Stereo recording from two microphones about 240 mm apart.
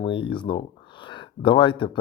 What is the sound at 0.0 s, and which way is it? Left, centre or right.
Speech, left.